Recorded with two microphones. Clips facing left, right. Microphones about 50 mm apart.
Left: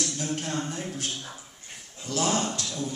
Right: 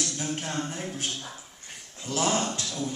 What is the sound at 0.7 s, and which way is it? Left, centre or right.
Speech, right.